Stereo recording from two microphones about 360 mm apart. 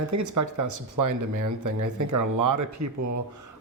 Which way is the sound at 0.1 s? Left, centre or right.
Right.